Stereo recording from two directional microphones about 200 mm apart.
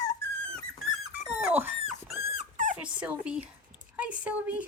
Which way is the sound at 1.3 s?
5° right (ahead or behind).